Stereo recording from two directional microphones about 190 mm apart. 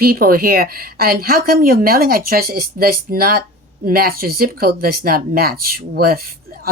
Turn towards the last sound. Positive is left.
turn(degrees=-50)  # may be behind; listen again after turning